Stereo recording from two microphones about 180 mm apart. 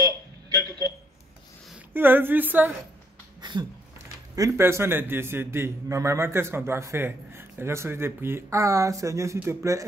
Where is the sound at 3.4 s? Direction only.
25° right (ahead or behind).